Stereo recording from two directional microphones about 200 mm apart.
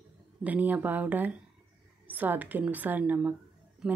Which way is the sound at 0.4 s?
10° right (ahead or behind).